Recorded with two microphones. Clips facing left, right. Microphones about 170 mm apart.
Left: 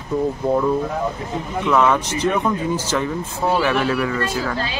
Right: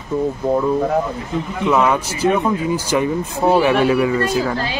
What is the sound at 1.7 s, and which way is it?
Speech, 10° right (ahead or behind).